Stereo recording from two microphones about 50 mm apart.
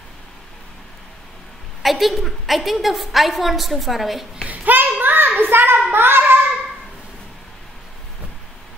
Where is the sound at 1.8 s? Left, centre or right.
Centre.